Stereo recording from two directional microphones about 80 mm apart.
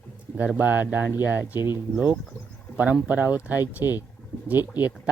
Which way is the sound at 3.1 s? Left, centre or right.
Right.